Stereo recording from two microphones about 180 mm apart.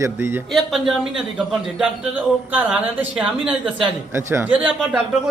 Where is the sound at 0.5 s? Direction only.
Centre (ahead or behind).